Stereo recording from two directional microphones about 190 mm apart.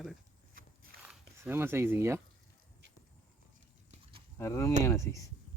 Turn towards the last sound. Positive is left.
turn(degrees=15)  # may be behind; listen again after turning